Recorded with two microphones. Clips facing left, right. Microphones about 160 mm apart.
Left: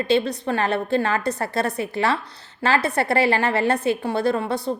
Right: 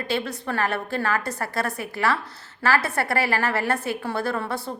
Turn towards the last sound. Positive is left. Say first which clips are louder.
# left 5 dB
turn(degrees=20)  # may be behind; listen again after turning